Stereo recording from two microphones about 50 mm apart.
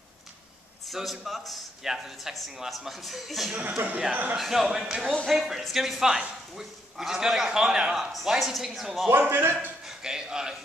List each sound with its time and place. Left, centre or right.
0.8 s a man's voice: centre
4.1 s speech: right
4.4 s a man's voice: centre
9.3 s a man's voice: right
9.8 s a man's voice: centre